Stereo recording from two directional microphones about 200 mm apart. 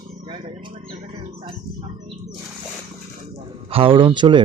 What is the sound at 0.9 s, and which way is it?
Music, 30° right (ahead or behind).